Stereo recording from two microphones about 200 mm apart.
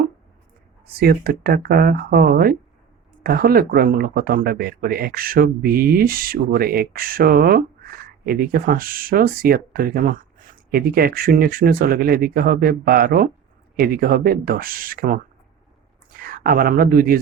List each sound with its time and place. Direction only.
0.9 s speech: 50° right (ahead or behind)